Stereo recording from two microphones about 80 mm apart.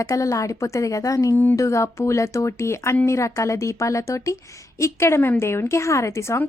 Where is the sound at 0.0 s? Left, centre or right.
Left.